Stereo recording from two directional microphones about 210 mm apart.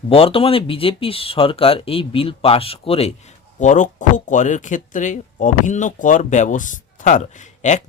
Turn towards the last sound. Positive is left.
turn(degrees=35)  # may be behind; listen again after turning